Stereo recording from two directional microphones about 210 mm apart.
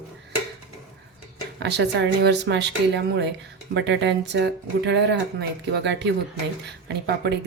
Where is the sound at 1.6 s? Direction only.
55° right (ahead or behind).